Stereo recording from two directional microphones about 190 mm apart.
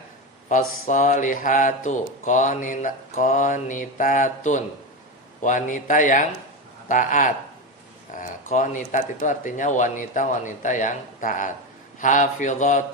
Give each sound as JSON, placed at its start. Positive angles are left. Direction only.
{"t": 0.4, "sound": "a man's voice", "side_deg": 40}